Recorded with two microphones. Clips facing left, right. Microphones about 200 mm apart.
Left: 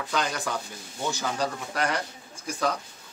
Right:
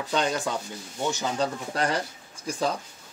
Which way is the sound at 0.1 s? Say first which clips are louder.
Right 3 dB; 25° right (ahead or behind).